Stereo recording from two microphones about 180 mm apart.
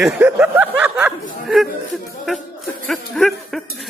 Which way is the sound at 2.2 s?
Centre (ahead or behind).